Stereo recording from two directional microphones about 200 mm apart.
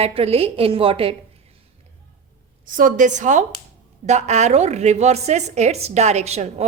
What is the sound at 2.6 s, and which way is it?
A woman's voice, 40° right (ahead or behind).